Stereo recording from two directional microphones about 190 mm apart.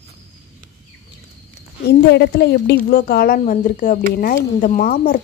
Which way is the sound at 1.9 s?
60° left (ahead or behind).